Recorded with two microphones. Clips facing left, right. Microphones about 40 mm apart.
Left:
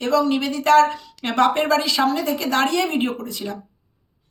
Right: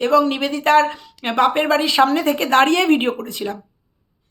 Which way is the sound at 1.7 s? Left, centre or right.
Right.